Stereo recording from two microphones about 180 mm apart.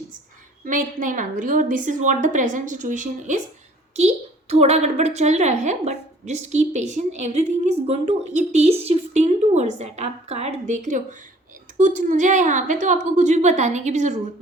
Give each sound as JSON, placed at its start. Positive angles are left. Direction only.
{"t": 0.6, "sound": "a woman's voice", "side_deg": -50}